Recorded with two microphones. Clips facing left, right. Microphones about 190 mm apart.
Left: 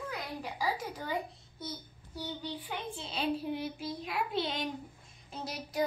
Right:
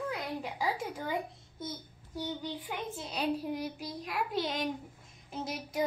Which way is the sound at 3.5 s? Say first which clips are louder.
Even; 40° right (ahead or behind).